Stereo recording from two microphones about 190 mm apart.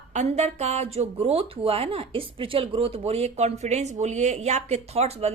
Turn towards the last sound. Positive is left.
turn(degrees=-35)  # may be behind; listen again after turning